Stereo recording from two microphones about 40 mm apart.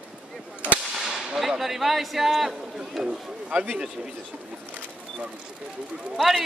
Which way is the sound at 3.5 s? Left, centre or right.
Right.